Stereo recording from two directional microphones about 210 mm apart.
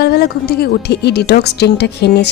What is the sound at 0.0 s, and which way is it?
A woman's voice, 50° left (ahead or behind).